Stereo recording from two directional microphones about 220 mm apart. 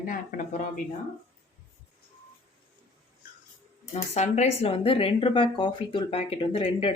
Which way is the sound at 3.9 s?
30° left (ahead or behind).